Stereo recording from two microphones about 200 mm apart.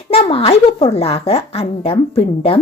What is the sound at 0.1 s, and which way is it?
A woman's voice, 30° left (ahead or behind).